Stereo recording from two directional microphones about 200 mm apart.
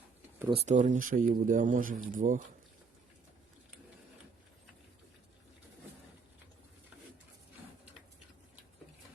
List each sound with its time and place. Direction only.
0.4 s speech: 30° right (ahead or behind)